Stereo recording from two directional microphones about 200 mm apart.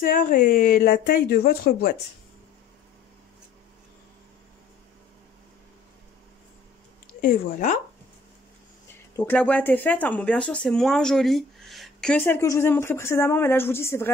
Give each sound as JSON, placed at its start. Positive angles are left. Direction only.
{"t": 0.0, "sound": "speech", "side_deg": 45}
{"t": 7.2, "sound": "speech", "side_deg": 40}
{"t": 9.1, "sound": "speech", "side_deg": 10}